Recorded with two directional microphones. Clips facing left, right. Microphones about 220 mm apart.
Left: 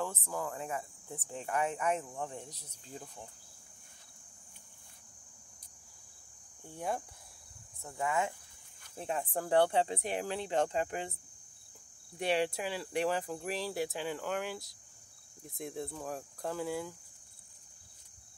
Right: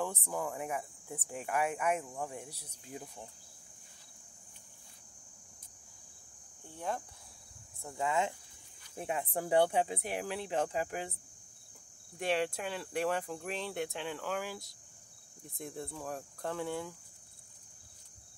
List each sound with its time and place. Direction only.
0.0 s speech: 15° right (ahead or behind)
6.7 s speech: 10° left (ahead or behind)
7.8 s speech: 20° right (ahead or behind)
8.9 s speech: 10° right (ahead or behind)
12.2 s speech: centre (ahead or behind)